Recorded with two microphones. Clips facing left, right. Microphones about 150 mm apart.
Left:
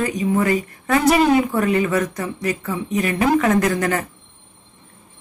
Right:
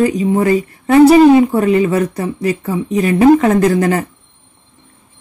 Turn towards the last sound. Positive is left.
turn(degrees=-30)  # may be behind; listen again after turning